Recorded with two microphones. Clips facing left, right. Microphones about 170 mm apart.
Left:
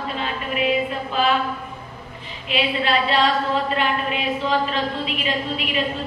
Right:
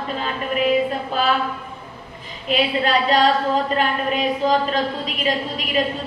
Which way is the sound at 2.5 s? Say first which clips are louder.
Right 2 dB; 40° right (ahead or behind).